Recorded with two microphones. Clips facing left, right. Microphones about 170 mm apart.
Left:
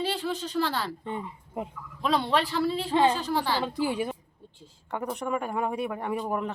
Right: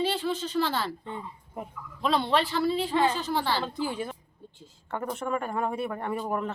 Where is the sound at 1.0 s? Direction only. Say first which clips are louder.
Left 4 dB; 20° left (ahead or behind).